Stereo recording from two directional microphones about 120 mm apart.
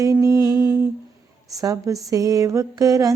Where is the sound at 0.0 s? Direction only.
30° right (ahead or behind).